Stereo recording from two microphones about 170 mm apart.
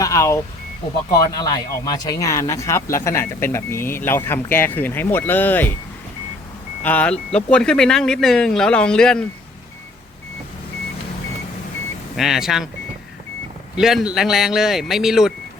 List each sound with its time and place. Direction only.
0.0 s speech: 20° left (ahead or behind)
6.8 s speech: 10° left (ahead or behind)
12.1 s speech: centre (ahead or behind)
13.7 s speech: 5° right (ahead or behind)